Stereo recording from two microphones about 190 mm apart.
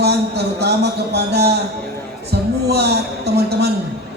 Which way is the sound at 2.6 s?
60° right (ahead or behind).